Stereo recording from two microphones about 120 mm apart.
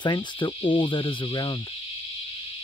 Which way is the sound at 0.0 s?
40° left (ahead or behind).